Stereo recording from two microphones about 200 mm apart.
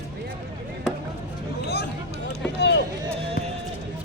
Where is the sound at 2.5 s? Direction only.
60° left (ahead or behind).